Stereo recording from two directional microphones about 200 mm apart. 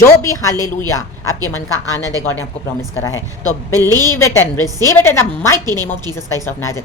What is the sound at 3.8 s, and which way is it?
A woman's voice, 15° left (ahead or behind).